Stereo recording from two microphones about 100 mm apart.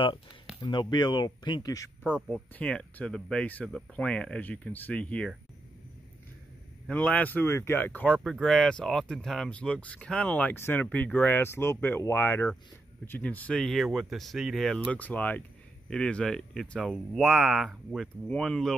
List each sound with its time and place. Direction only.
0.6 s speech: 45° left (ahead or behind)
2.2 s speech: 10° left (ahead or behind)
6.9 s speech: 15° left (ahead or behind)
8.2 s speech: centre (ahead or behind)
14.9 s speech: 15° left (ahead or behind)